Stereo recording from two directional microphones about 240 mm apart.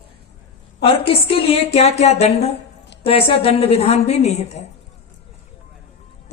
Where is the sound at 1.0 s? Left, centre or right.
Left.